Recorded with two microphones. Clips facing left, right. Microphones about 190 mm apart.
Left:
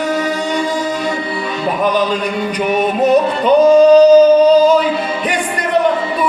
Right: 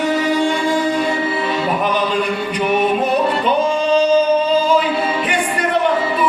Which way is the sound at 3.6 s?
40° left (ahead or behind).